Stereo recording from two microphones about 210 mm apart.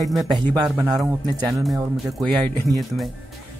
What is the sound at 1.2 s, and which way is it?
Speech, 20° right (ahead or behind).